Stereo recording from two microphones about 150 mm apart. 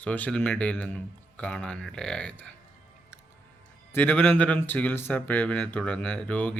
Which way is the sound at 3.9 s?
10° left (ahead or behind).